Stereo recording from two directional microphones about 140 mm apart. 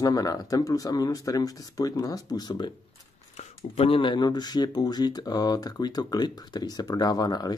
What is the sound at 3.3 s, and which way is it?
Speech, 50° left (ahead or behind).